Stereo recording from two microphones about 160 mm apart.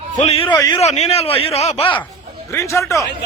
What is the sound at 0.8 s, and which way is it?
A man's voice, 45° left (ahead or behind).